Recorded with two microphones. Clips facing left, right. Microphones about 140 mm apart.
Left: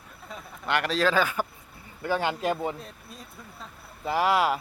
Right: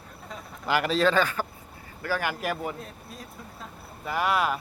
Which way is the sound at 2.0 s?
20° left (ahead or behind).